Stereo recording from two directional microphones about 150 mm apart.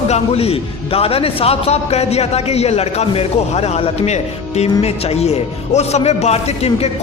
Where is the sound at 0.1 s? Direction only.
40° left (ahead or behind).